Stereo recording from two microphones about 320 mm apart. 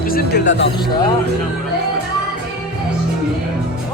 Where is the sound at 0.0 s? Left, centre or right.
Left.